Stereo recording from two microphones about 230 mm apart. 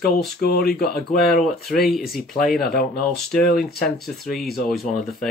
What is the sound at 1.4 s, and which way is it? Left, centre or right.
Speech, centre.